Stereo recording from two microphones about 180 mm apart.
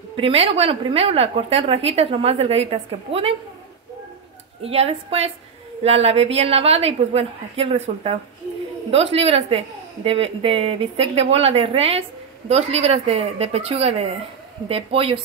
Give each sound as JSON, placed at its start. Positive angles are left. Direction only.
{"t": 0.1, "sound": "a woman's voice", "side_deg": -30}
{"t": 4.6, "sound": "a woman's voice", "side_deg": -35}